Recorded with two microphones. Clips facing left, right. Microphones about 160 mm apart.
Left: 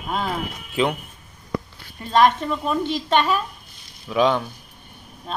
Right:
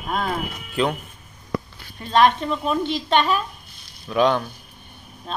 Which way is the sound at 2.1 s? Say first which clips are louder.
Even; 5° left (ahead or behind).